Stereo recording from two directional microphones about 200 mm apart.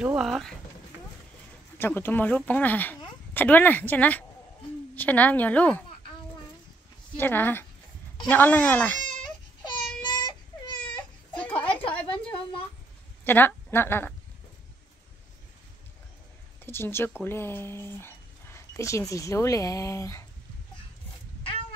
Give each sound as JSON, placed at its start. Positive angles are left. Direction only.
{"t": 0.0, "sound": "speech", "side_deg": -5}
{"t": 1.8, "sound": "speech", "side_deg": 10}
{"t": 7.2, "sound": "speech", "side_deg": 10}
{"t": 10.0, "sound": "baby cry", "side_deg": 20}
{"t": 11.3, "sound": "a sound", "side_deg": 5}
{"t": 11.7, "sound": "a sound", "side_deg": 25}
{"t": 13.2, "sound": "a woman's voice", "side_deg": 10}
{"t": 16.6, "sound": "speech", "side_deg": 10}